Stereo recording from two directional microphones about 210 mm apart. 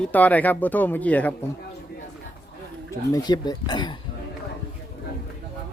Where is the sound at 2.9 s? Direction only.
15° left (ahead or behind).